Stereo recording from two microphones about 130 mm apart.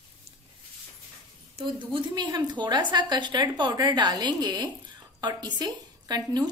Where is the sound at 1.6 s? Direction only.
40° right (ahead or behind).